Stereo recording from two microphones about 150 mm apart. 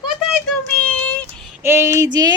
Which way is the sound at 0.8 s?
10° left (ahead or behind).